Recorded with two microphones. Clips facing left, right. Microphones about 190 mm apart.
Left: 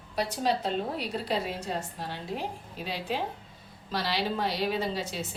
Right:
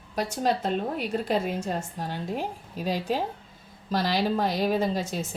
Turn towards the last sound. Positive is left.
turn(degrees=-45)  # may be behind; listen again after turning